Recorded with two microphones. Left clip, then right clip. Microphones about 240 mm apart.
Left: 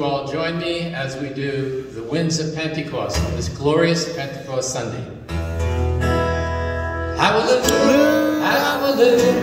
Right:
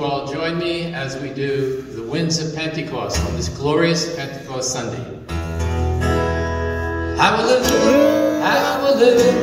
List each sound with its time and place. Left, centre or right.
0.0 s speech: left
2.1 s speech: left
6.0 s music: left